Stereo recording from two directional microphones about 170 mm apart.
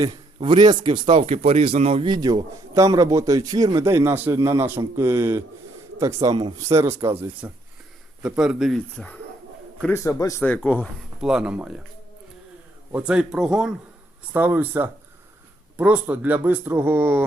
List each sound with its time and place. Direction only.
0.3 s a man's voice: 25° right (ahead or behind); by 9.1 s 5° left (ahead or behind)
9.9 s a man's voice: 20° left (ahead or behind)
10.4 s speech: 5° left (ahead or behind)
11.2 s speech: 5° right (ahead or behind)
12.9 s speech: 5° right (ahead or behind)